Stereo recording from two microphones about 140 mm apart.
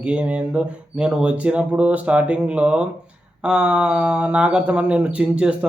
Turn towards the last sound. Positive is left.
turn(degrees=-5)  # may be behind; listen again after turning